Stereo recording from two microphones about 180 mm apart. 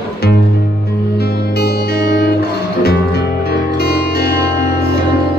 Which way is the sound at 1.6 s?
60° left (ahead or behind).